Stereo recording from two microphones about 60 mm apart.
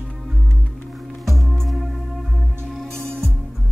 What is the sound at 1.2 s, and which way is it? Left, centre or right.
Music, centre.